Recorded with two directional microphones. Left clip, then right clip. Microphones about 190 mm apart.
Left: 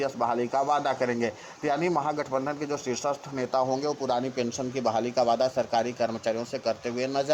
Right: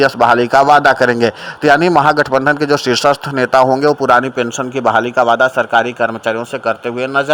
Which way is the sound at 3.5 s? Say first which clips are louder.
Right 16 dB; 40° right (ahead or behind).